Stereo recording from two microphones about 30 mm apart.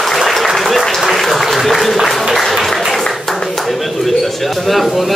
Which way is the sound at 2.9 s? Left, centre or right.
Centre.